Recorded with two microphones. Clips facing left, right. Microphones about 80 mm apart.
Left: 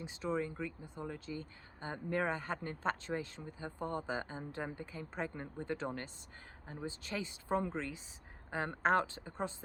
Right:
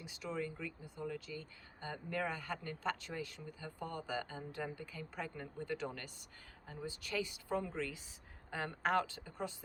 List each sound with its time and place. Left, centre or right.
0.0 s speech: left